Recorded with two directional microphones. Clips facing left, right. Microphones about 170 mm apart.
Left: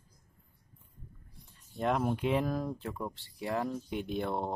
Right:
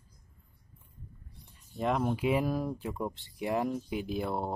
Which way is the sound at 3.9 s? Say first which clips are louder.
Right 1 dB; 5° right (ahead or behind).